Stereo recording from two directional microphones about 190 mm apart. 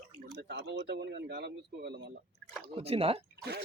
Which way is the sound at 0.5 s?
60° right (ahead or behind).